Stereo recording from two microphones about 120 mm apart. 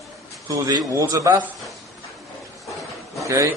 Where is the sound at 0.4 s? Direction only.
30° right (ahead or behind).